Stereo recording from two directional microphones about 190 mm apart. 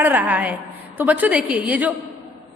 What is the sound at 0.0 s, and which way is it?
A woman's voice, 10° right (ahead or behind).